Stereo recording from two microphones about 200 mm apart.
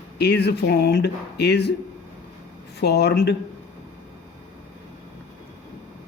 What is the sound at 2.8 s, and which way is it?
Speech, 55° left (ahead or behind).